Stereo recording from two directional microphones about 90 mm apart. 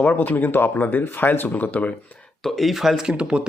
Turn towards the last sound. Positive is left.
turn(degrees=-10)  # may be behind; listen again after turning